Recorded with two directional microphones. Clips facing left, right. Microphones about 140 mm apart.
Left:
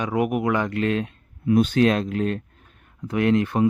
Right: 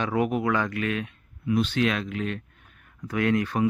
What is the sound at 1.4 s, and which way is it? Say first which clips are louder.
Speech: left 6 dB; 45° left (ahead or behind).